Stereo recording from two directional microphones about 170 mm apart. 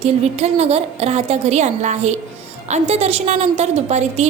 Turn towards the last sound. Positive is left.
turn(degrees=-40)  # may be behind; listen again after turning